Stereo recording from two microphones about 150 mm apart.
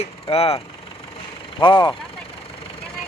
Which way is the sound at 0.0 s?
40° left (ahead or behind).